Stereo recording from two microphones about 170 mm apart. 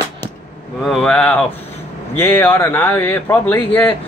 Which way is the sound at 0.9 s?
Centre (ahead or behind).